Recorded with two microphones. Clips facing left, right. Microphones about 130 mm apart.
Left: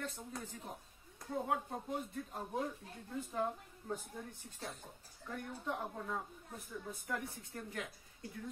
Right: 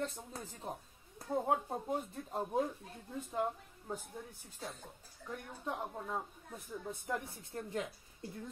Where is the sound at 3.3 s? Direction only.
15° right (ahead or behind).